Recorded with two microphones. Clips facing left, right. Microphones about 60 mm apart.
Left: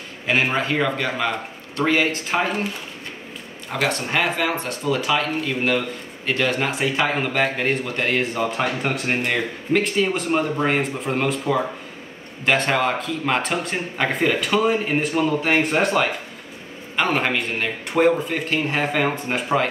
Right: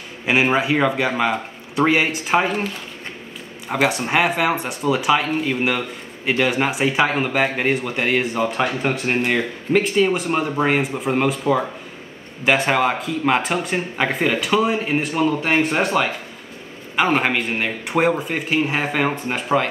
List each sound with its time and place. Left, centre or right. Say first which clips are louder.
0.3 s a man's voice: right 3 dB; centre
3.6 s a man's voice: right 4 dB; centre
12.4 s a man's voice: right 2 dB; centre